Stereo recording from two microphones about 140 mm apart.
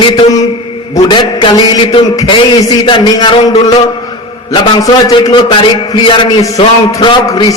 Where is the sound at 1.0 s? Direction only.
35° left (ahead or behind).